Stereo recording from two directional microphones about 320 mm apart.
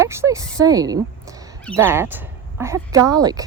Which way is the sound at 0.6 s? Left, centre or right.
Centre.